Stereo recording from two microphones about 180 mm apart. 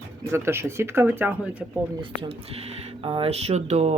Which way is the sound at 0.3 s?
15° right (ahead or behind).